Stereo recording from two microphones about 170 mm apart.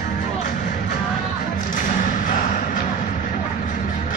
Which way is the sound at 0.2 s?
50° left (ahead or behind).